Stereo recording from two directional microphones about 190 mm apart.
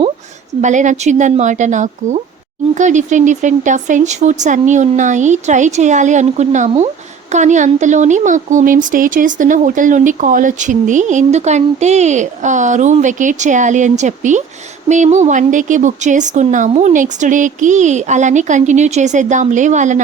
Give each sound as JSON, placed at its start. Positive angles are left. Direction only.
{"t": 0.6, "sound": "speech", "side_deg": -40}